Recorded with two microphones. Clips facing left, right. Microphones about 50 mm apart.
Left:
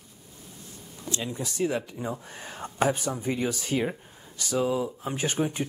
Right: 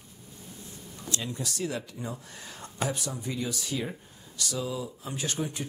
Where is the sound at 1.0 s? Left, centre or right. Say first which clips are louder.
Left 2 dB; left.